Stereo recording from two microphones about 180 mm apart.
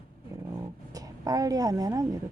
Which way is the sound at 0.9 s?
20° right (ahead or behind).